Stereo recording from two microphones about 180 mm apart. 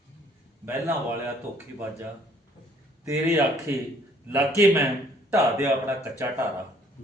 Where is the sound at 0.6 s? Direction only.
15° right (ahead or behind).